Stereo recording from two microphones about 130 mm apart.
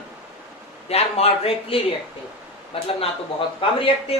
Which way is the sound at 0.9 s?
50° left (ahead or behind).